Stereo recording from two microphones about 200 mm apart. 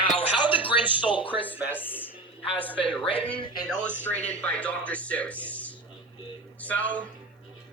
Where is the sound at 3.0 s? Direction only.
25° left (ahead or behind).